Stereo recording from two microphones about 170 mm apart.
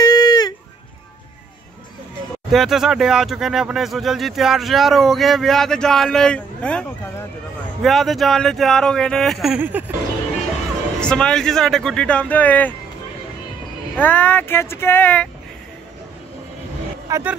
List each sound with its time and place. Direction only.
0.0 s a sound: 25° left (ahead or behind)
2.5 s speech: centre (ahead or behind)
11.0 s speech: 5° left (ahead or behind)
13.9 s speech: 10° left (ahead or behind)
17.1 s speech: 10° right (ahead or behind)